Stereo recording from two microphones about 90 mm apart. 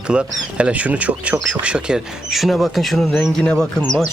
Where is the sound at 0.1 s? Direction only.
10° right (ahead or behind); by 3.8 s 10° left (ahead or behind).